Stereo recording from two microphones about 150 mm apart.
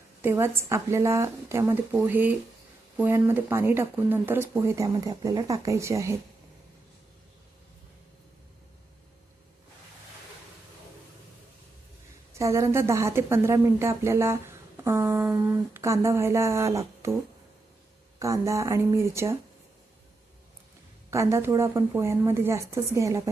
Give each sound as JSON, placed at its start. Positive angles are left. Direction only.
{"t": 0.2, "sound": "a woman's voice", "side_deg": -15}
{"t": 12.3, "sound": "a woman's voice", "side_deg": -20}
{"t": 18.2, "sound": "a woman's voice", "side_deg": -20}
{"t": 21.1, "sound": "a woman's voice", "side_deg": -20}